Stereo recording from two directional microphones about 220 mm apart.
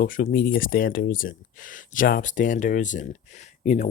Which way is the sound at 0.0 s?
40° left (ahead or behind).